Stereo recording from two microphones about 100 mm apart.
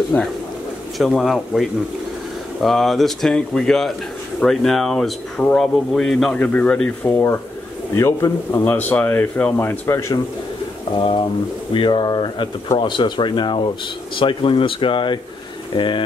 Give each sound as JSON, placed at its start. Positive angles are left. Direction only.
{"t": 0.1, "sound": "speech", "side_deg": 15}
{"t": 0.9, "sound": "speech", "side_deg": 0}
{"t": 6.4, "sound": "speech", "side_deg": 15}
{"t": 7.1, "sound": "a man's voice", "side_deg": 30}
{"t": 8.6, "sound": "a man's voice", "side_deg": 15}
{"t": 11.0, "sound": "speech", "side_deg": 55}